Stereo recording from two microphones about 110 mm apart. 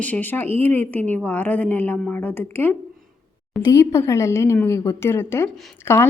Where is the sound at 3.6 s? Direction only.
30° left (ahead or behind).